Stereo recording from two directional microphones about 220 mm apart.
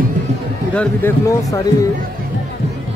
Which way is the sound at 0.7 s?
5° left (ahead or behind).